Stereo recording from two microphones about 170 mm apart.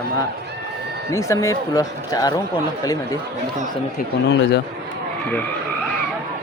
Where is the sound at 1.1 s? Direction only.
20° left (ahead or behind).